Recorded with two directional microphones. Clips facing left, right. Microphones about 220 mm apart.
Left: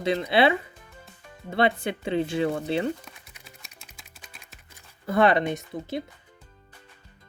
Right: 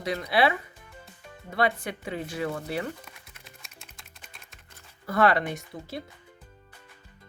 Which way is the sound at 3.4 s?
Centre (ahead or behind).